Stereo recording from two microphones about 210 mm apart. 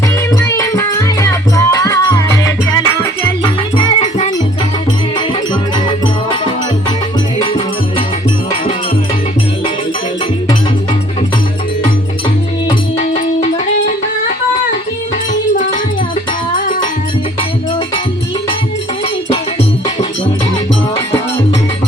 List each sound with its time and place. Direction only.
0.3 s music: 15° left (ahead or behind)
7.4 s music: 25° left (ahead or behind)
13.0 s music: 35° left (ahead or behind)